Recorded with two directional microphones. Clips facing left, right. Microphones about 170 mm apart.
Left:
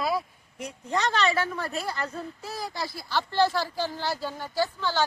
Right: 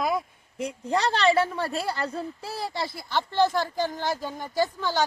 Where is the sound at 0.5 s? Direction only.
30° right (ahead or behind).